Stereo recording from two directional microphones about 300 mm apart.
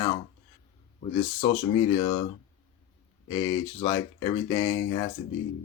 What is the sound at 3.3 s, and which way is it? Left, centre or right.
Speech, centre.